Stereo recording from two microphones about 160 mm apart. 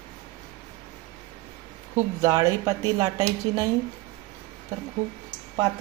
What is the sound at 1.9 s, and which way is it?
A woman's voice, 20° right (ahead or behind).